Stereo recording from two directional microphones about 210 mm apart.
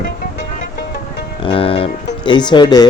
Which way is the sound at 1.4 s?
25° left (ahead or behind).